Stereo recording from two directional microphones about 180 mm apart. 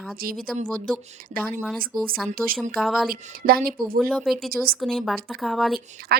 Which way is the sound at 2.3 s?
50° right (ahead or behind).